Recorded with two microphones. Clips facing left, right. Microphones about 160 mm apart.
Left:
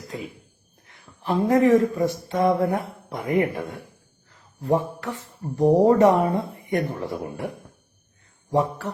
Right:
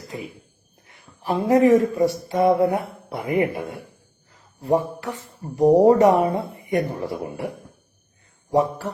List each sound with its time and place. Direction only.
1.2 s a woman's voice: 10° right (ahead or behind)
4.8 s a woman's voice: 15° right (ahead or behind)